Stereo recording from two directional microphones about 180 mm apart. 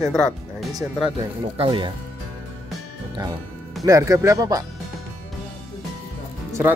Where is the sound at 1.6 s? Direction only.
30° right (ahead or behind).